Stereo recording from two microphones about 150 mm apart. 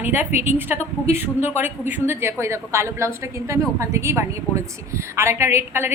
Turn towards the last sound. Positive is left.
turn(degrees=-15)  # may be behind; listen again after turning